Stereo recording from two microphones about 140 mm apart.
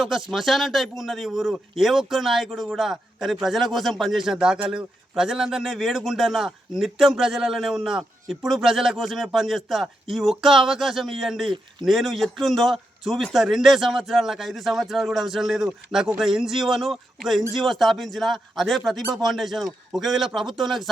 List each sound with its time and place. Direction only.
0.0 s a man's voice: centre (ahead or behind)